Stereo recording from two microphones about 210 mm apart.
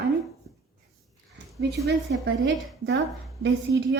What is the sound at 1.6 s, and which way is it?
A woman's voice, 50° right (ahead or behind).